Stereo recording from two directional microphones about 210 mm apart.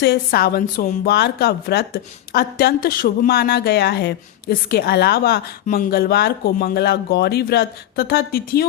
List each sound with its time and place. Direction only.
0.0 s a woman's voice: 50° left (ahead or behind)